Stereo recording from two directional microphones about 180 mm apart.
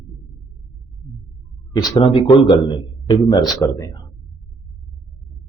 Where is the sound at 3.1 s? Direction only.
20° left (ahead or behind).